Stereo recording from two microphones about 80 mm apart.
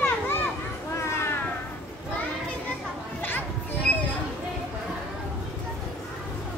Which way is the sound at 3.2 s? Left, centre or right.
Left.